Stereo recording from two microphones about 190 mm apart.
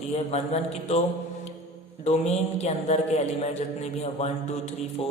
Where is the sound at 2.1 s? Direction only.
35° left (ahead or behind).